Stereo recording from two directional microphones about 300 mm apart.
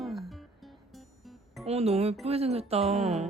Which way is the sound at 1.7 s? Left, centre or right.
Right.